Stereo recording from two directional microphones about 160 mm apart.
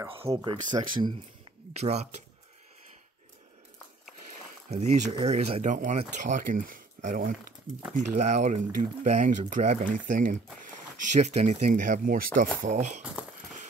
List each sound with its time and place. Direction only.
0.3 s speech: centre (ahead or behind)
0.7 s speech: 30° right (ahead or behind)
1.7 s speech: 40° right (ahead or behind)
4.6 s speech: 45° right (ahead or behind)
11.1 s speech: 45° right (ahead or behind)
12.6 s speech: 50° right (ahead or behind)